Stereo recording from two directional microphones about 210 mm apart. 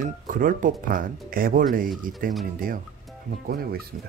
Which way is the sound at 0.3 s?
40° right (ahead or behind).